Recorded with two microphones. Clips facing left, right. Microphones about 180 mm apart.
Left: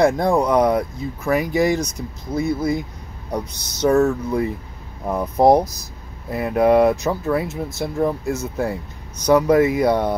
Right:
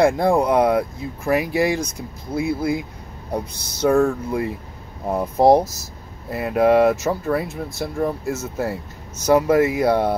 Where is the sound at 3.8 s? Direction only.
5° right (ahead or behind).